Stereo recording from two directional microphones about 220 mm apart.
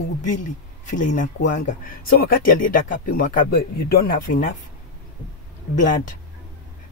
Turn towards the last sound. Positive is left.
turn(degrees=35)  # may be behind; listen again after turning